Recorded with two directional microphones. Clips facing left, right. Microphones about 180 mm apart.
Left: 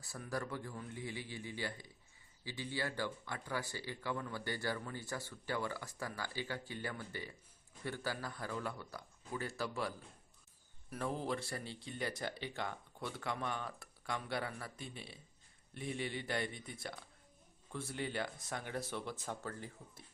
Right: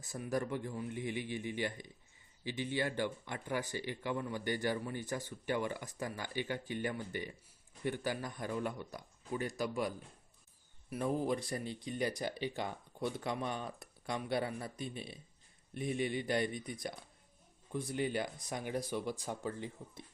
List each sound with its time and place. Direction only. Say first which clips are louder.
0.0 s a man's voice: right 5 dB; 20° right (ahead or behind)